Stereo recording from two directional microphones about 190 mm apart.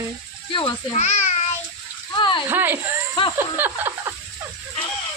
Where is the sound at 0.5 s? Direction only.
30° left (ahead or behind).